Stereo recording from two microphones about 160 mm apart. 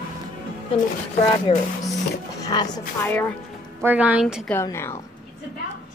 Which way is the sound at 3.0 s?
10° left (ahead or behind).